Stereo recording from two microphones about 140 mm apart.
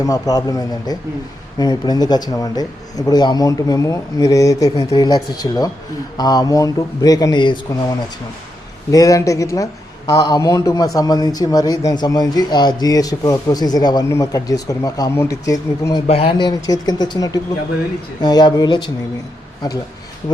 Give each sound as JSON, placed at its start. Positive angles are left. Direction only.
{"t": 0.0, "sound": "speech", "side_deg": 25}
{"t": 8.9, "sound": "speech", "side_deg": 25}
{"t": 16.0, "sound": "speech", "side_deg": 45}
{"t": 16.6, "sound": "speech", "side_deg": 25}